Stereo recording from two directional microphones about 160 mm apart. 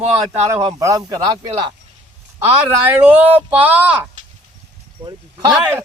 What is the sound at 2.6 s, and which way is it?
Speech, 10° right (ahead or behind).